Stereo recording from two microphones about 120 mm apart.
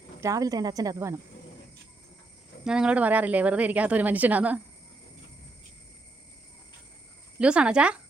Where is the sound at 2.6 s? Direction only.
5° right (ahead or behind).